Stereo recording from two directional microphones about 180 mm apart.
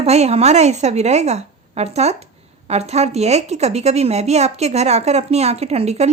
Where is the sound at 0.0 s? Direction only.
35° right (ahead or behind).